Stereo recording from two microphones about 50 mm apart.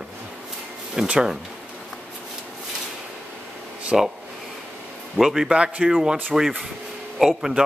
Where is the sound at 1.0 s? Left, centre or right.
Right.